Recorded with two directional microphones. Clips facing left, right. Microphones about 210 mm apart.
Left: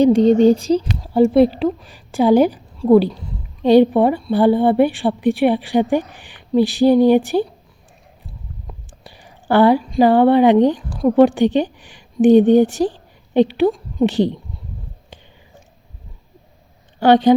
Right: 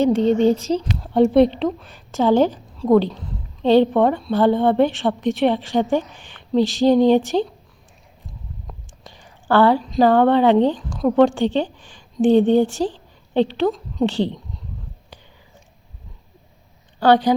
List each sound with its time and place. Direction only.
0.2 s speech: 35° left (ahead or behind)
0.6 s a woman's voice: 10° left (ahead or behind)
8.7 s whispering: 5° left (ahead or behind)
9.0 s speech: 15° left (ahead or behind)
10.9 s a woman's voice: 5° left (ahead or behind)
11.3 s a woman's voice: 15° left (ahead or behind)
17.0 s a woman's voice: 25° left (ahead or behind)